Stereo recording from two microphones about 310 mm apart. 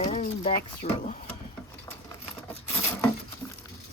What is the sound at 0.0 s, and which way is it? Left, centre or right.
Speech, left.